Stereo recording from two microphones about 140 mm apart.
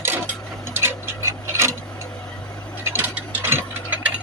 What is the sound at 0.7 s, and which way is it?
Clock, 15° right (ahead or behind).